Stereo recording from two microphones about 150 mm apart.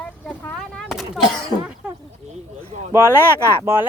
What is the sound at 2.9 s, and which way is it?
Speech, 15° right (ahead or behind).